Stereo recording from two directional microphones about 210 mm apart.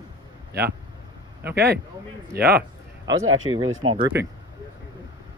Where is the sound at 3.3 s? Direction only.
75° right (ahead or behind).